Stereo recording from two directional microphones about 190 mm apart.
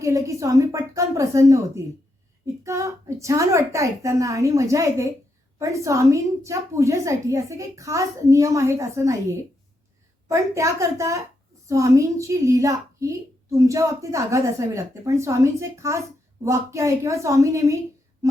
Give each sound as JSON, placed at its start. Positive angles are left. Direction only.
{"t": 0.0, "sound": "a woman's voice", "side_deg": -15}